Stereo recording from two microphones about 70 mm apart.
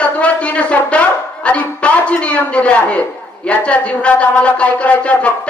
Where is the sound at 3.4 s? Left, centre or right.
Centre.